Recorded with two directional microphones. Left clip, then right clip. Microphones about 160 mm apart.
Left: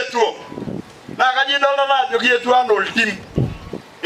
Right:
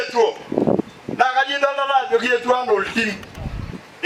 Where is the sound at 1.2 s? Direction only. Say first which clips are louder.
Left 2 dB; 25° left (ahead or behind).